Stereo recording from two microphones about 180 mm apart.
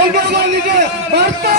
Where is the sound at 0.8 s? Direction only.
65° right (ahead or behind).